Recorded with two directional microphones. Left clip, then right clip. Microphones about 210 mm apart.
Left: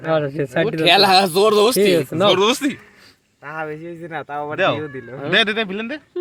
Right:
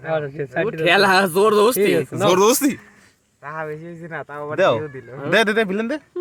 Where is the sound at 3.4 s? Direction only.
40° left (ahead or behind).